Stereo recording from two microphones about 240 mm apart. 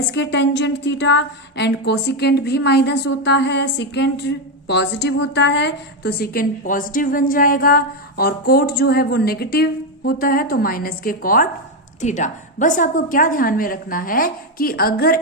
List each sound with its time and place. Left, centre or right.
0.1 s a woman's voice: left